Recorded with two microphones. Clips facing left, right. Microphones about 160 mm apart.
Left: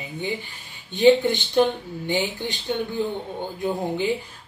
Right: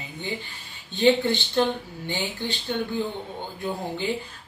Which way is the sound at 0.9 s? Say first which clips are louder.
Left 4 dB; 15° left (ahead or behind).